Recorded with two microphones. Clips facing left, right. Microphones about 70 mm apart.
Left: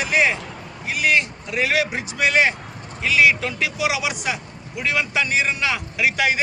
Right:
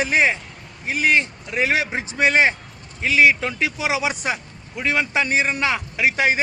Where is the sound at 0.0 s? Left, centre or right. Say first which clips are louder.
Right 1 dB; right.